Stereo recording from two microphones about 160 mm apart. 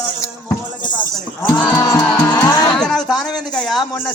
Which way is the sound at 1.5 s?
10° left (ahead or behind).